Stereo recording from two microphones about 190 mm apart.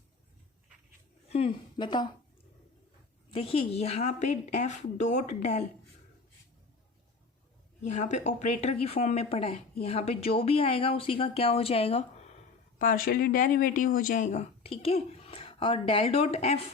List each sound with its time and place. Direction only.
1.3 s a woman's voice: 30° left (ahead or behind)
3.3 s speech: 30° left (ahead or behind)
7.9 s speech: 40° left (ahead or behind)
12.8 s speech: 50° left (ahead or behind); by 16.6 s 35° left (ahead or behind)